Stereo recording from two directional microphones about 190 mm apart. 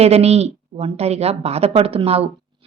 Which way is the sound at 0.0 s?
35° right (ahead or behind).